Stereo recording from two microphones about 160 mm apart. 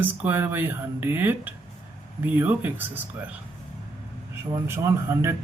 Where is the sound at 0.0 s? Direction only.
10° right (ahead or behind).